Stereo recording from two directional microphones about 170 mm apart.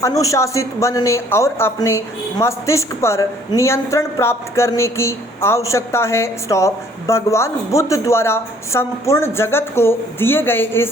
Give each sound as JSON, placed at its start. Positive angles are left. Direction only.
{"t": 0.0, "sound": "speech", "side_deg": 20}